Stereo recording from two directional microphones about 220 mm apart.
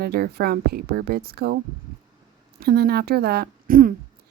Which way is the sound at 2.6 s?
45° right (ahead or behind).